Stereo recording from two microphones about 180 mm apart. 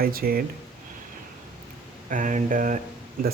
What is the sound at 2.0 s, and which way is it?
Speech, 45° right (ahead or behind).